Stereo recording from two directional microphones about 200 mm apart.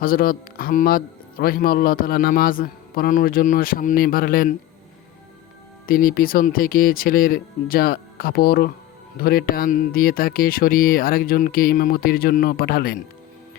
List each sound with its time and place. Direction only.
0.0 s speech: 45° left (ahead or behind)
5.8 s speech: 45° left (ahead or behind)